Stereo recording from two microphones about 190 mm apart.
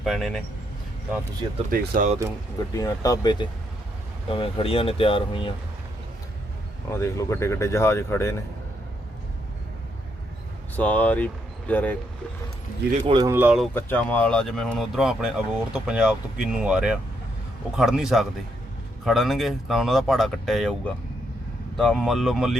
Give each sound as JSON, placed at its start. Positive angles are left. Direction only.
{"t": 0.0, "sound": "speech", "side_deg": 0}
{"t": 1.7, "sound": "speech", "side_deg": -45}
{"t": 2.7, "sound": "speech", "side_deg": 20}
{"t": 6.9, "sound": "speech", "side_deg": 15}
{"t": 10.8, "sound": "speech", "side_deg": 10}
{"t": 13.1, "sound": "speech", "side_deg": -20}
{"t": 13.3, "sound": "speech", "side_deg": -5}
{"t": 13.7, "sound": "speech", "side_deg": 10}